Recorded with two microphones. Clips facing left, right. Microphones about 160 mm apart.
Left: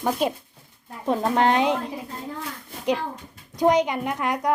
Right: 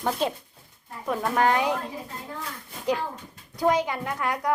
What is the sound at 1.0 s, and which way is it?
Speech, 25° left (ahead or behind).